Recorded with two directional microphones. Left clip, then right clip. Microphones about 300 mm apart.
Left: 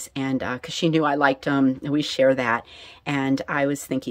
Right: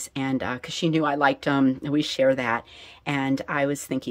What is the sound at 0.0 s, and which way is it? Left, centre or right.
Speech, centre.